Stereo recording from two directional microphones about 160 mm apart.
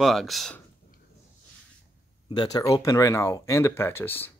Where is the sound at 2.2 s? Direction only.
25° left (ahead or behind).